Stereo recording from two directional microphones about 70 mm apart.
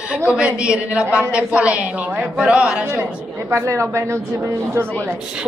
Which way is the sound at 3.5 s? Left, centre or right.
Right.